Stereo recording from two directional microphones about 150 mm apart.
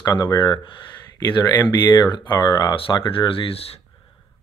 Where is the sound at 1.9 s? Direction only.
30° left (ahead or behind).